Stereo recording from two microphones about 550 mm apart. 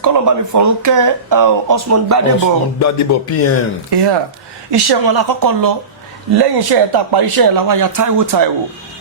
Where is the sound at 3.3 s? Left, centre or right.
Left.